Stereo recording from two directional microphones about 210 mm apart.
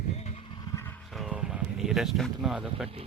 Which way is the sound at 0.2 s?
30° left (ahead or behind).